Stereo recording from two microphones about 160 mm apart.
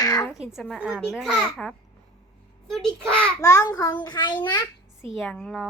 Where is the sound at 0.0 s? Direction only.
25° left (ahead or behind).